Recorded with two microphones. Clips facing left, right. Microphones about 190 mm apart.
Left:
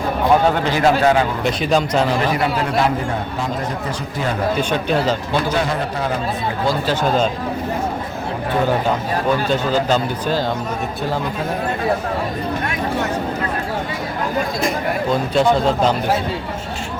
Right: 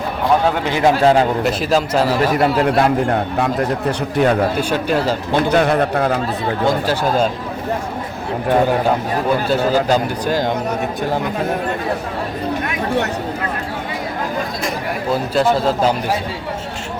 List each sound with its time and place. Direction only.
0.7 s speech: 20° right (ahead or behind)
1.5 s a man's voice: 5° right (ahead or behind)
2.3 s a man's voice: 50° right (ahead or behind)
3.3 s speech: 60° right (ahead or behind)
4.7 s speech: 5° right (ahead or behind)
5.5 s speech: 60° right (ahead or behind)
9.5 s speech: 10° right (ahead or behind)
15.1 s a man's voice: 5° right (ahead or behind)